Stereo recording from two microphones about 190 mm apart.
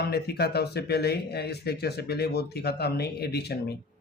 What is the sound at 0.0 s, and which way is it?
Speech, 55° left (ahead or behind).